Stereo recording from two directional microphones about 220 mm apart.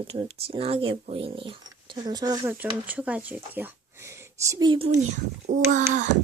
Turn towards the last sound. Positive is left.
turn(degrees=-35)  # may be behind; listen again after turning